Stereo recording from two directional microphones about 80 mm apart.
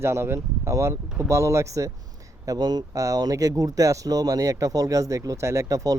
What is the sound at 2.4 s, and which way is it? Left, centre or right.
Speech, right.